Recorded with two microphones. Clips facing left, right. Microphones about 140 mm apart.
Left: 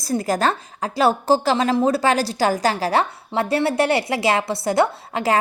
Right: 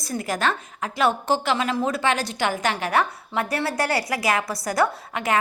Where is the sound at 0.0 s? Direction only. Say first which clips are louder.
Left 5 dB; 35° left (ahead or behind).